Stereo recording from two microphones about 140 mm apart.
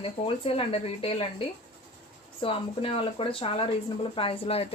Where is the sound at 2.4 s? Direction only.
40° left (ahead or behind).